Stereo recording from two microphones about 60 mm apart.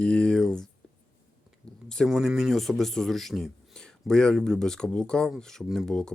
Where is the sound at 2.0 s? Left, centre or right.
Centre.